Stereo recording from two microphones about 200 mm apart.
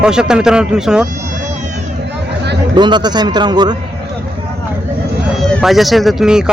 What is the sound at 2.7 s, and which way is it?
A man's voice, 20° right (ahead or behind).